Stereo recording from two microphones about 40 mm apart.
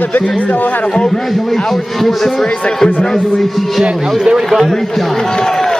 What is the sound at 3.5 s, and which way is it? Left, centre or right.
A man's voice, centre.